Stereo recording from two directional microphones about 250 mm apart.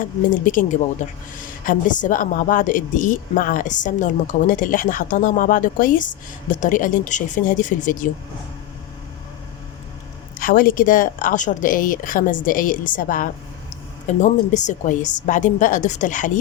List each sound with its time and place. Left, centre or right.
0.0 s a woman's voice: left
1.6 s a woman's voice: left
10.3 s a woman's voice: left